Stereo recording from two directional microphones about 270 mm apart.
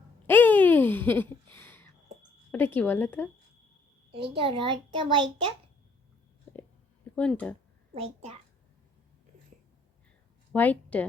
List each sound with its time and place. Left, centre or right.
0.3 s a sound: centre
2.5 s speech: centre
4.1 s a child's voice: centre
7.2 s speech: centre
7.9 s a child's voice: right
10.5 s a woman's voice: centre